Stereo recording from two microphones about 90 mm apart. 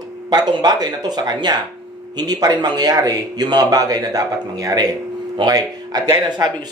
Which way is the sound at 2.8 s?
45° right (ahead or behind).